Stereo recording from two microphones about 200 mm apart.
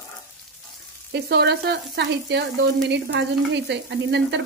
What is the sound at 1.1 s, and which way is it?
Frying, 55° right (ahead or behind).